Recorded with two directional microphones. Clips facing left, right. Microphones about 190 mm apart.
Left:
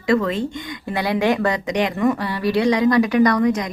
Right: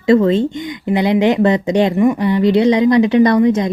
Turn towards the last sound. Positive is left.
turn(degrees=-25)  # may be behind; listen again after turning